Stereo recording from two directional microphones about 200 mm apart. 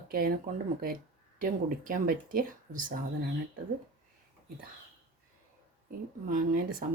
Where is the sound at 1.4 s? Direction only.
45° right (ahead or behind).